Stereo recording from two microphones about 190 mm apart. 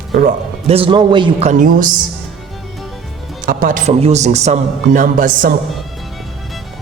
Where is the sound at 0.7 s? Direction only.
30° right (ahead or behind).